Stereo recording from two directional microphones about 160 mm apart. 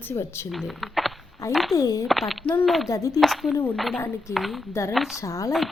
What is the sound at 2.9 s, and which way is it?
Speech, 20° left (ahead or behind).